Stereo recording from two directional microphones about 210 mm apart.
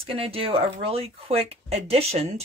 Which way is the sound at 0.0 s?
25° right (ahead or behind).